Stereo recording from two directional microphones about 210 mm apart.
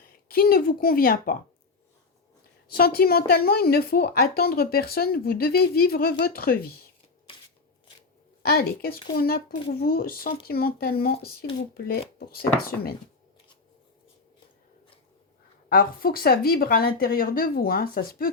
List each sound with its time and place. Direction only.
0.3 s speech: 45° left (ahead or behind)
2.6 s speech: 45° left (ahead or behind)
8.4 s speech: 45° left (ahead or behind)
15.7 s speech: 45° left (ahead or behind)